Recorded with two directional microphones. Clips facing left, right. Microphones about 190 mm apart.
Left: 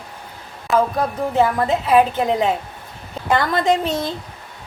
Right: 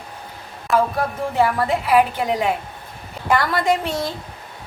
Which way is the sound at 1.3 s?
20° left (ahead or behind).